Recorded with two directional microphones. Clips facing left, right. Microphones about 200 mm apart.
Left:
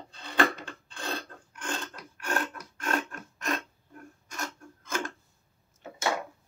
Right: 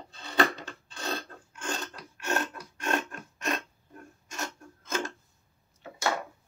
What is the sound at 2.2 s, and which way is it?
Filing, 25° right (ahead or behind).